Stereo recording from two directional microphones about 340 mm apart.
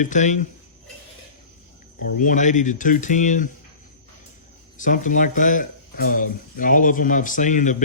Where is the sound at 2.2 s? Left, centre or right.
Left.